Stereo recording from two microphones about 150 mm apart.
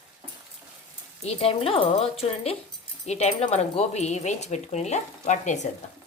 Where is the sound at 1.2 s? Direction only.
40° left (ahead or behind).